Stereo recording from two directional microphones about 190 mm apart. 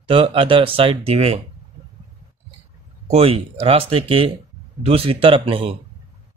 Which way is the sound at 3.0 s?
30° right (ahead or behind).